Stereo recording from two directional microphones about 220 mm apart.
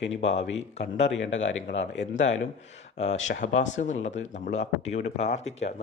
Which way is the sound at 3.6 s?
35° left (ahead or behind).